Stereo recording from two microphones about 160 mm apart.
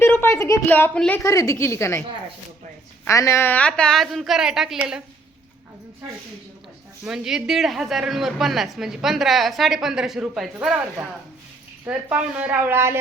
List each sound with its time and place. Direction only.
0.0 s a sound: 15° left (ahead or behind)
0.7 s a woman's voice: 10° left (ahead or behind)
1.2 s a woman's voice: 20° left (ahead or behind); by 5.0 s 5° right (ahead or behind)
7.0 s speech: 5° right (ahead or behind)
11.9 s a woman's voice: 10° right (ahead or behind)